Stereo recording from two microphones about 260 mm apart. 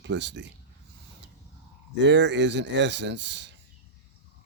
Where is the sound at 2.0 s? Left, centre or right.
Right.